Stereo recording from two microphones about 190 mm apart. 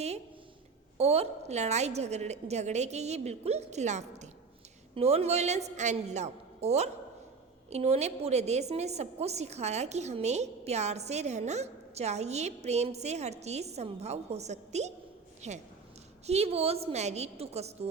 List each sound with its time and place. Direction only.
0.9 s a woman's voice: 35° right (ahead or behind)